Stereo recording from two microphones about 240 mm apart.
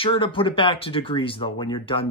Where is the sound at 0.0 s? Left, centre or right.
Left.